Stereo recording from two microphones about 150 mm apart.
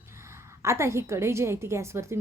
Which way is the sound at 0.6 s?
20° right (ahead or behind).